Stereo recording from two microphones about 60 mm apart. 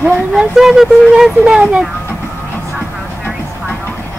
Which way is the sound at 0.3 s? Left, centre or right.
Centre.